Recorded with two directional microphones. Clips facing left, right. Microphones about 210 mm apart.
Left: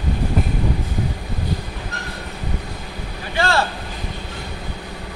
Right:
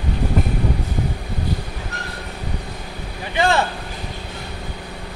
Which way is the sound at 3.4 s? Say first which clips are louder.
Right 2 dB; 20° right (ahead or behind).